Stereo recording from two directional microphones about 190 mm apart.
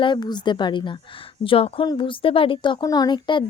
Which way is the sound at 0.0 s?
25° left (ahead or behind).